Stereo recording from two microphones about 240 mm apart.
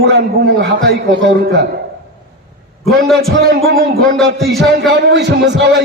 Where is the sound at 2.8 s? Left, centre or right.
Centre.